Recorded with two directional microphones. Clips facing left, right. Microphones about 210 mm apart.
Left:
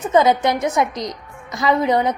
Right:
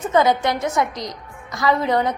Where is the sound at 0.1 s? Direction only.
20° left (ahead or behind).